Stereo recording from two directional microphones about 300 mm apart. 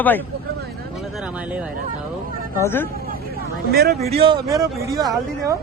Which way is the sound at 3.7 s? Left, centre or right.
Right.